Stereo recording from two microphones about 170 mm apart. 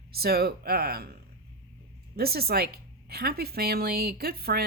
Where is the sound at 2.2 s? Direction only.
65° right (ahead or behind).